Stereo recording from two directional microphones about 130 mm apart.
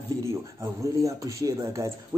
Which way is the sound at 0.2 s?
25° right (ahead or behind).